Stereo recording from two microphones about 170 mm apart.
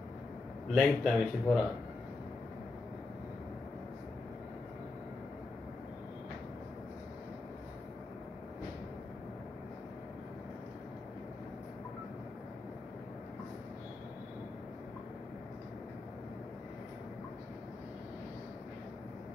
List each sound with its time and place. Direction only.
0.7 s speech: centre (ahead or behind)